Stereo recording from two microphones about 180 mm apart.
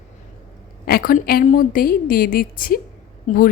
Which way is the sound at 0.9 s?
55° left (ahead or behind).